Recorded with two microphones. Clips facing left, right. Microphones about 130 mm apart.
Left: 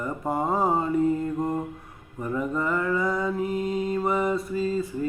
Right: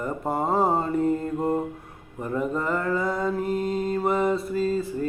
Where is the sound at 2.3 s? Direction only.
30° right (ahead or behind).